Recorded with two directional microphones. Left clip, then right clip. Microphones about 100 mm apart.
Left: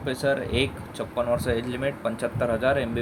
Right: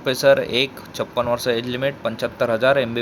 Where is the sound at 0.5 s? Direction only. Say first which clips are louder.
Right 5 dB; 35° right (ahead or behind).